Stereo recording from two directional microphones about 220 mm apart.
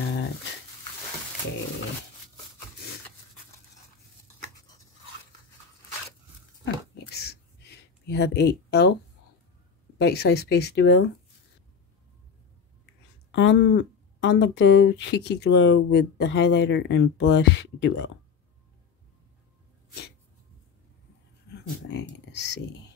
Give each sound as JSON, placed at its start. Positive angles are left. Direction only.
{"t": 6.6, "sound": "a sound", "side_deg": 45}
{"t": 9.9, "sound": "speech", "side_deg": 50}
{"t": 13.3, "sound": "speech", "side_deg": 55}
{"t": 21.8, "sound": "speech", "side_deg": 50}